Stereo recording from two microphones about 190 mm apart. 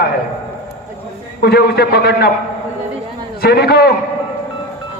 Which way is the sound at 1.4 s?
55° left (ahead or behind).